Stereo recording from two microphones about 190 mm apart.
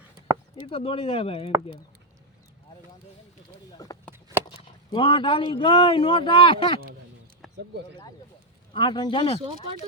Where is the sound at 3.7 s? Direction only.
20° left (ahead or behind).